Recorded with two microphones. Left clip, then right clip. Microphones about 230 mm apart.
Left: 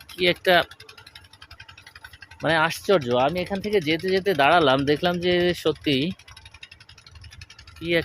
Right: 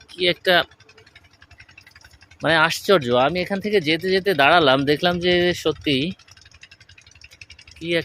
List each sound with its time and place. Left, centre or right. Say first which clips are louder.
0.1 s speech: right 1 dB; centre
2.4 s speech: right 4 dB; centre
7.8 s speech: right 1 dB; centre